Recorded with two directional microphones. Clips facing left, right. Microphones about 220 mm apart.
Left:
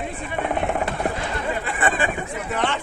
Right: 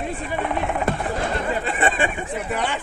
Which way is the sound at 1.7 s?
25° right (ahead or behind).